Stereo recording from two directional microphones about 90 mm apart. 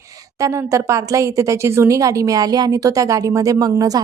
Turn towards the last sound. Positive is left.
turn(degrees=-45)  # may be behind; listen again after turning